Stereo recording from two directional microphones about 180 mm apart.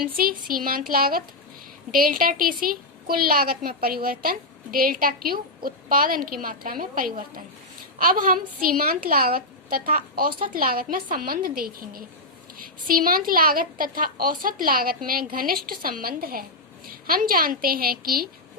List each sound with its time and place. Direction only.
0.0 s a woman's voice: 55° right (ahead or behind)